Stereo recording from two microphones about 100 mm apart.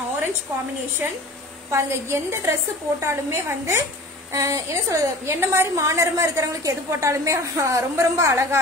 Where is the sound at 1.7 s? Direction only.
25° right (ahead or behind).